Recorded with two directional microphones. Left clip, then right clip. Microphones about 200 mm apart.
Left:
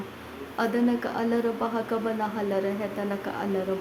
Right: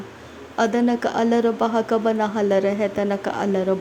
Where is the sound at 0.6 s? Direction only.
30° right (ahead or behind).